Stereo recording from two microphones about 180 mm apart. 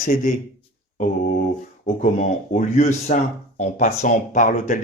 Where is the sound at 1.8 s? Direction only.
40° left (ahead or behind).